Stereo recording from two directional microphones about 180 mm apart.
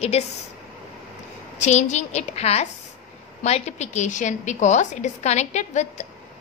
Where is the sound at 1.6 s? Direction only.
40° left (ahead or behind).